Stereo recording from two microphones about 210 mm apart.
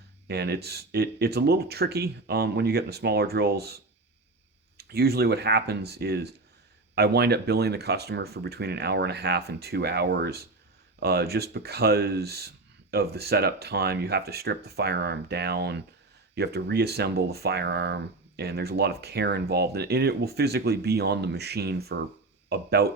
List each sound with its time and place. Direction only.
0.3 s speech: 50° right (ahead or behind)
4.8 s speech: 50° right (ahead or behind)